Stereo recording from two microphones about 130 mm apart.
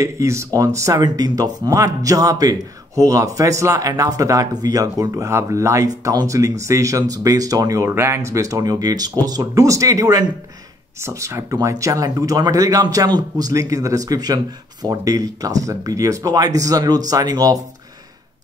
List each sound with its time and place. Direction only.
0.0 s speech: 20° right (ahead or behind)